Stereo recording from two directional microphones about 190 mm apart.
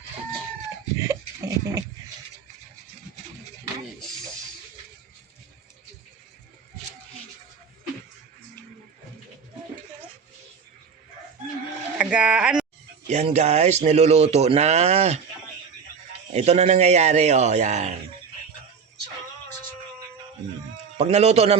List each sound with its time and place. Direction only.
0.9 s goat: 15° right (ahead or behind)
11.9 s speech: 5° right (ahead or behind)
13.1 s speech: 35° right (ahead or behind)
16.3 s speech: 35° right (ahead or behind)
20.7 s a man's voice: 35° right (ahead or behind)